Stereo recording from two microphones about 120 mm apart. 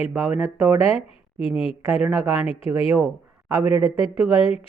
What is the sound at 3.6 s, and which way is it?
Speech, 55° left (ahead or behind).